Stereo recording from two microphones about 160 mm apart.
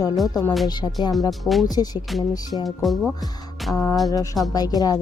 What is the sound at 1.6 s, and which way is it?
Speech, 25° left (ahead or behind).